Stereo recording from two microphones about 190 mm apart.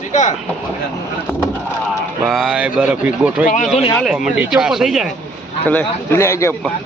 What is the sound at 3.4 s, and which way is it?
Speech, 40° left (ahead or behind).